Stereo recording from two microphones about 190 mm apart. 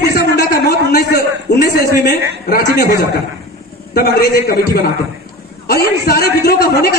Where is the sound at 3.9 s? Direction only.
55° left (ahead or behind).